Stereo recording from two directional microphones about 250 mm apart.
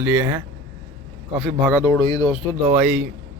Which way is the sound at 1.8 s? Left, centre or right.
Centre.